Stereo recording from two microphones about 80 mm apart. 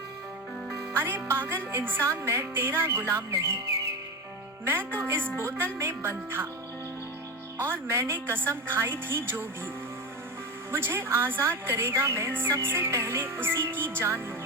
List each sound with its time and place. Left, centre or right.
0.9 s a woman's voice: right
4.9 s speech: right
7.6 s a woman's voice: right
10.7 s a woman's voice: right